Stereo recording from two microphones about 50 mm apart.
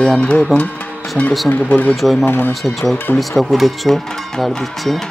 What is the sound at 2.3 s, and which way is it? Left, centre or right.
Speech, left.